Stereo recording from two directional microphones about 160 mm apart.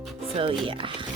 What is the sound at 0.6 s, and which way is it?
Speech, 30° right (ahead or behind).